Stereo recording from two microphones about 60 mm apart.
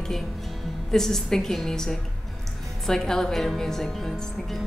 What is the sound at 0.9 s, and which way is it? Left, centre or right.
Speech, centre.